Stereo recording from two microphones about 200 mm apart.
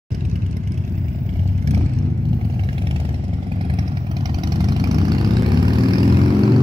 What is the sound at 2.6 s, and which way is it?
Vehicle, 25° right (ahead or behind).